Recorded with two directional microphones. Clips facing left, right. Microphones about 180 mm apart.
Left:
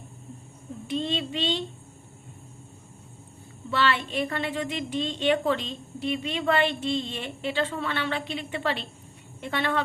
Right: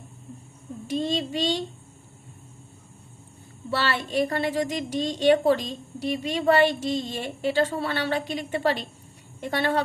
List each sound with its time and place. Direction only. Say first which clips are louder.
0.9 s a woman's voice: right 2 dB; 40° right (ahead or behind)
3.7 s a woman's voice: left 1 dB; 40° right (ahead or behind)